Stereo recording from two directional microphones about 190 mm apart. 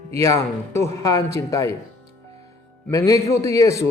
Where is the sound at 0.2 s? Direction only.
15° left (ahead or behind).